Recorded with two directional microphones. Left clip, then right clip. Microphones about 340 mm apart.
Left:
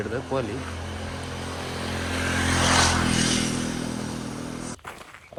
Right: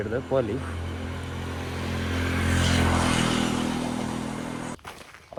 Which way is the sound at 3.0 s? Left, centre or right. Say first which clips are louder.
Even; centre.